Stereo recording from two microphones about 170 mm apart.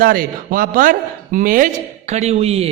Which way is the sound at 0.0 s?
55° right (ahead or behind).